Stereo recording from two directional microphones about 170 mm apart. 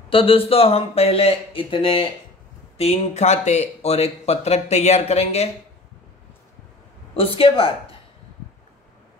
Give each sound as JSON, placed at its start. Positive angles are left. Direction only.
{"t": 0.1, "sound": "speech", "side_deg": 30}
{"t": 7.2, "sound": "speech", "side_deg": 30}